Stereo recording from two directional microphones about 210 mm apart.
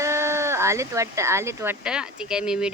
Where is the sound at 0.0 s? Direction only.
15° right (ahead or behind).